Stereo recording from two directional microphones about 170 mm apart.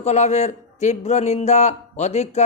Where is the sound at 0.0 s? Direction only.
40° left (ahead or behind).